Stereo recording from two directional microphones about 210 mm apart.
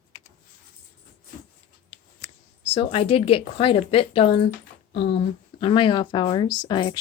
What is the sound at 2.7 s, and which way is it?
Speech, 25° left (ahead or behind).